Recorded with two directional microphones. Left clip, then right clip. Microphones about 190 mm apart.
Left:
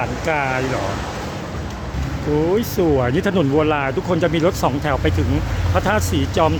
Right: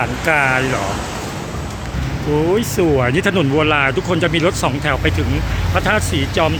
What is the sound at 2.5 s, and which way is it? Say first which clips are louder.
Speech: right 3 dB; 10° left (ahead or behind).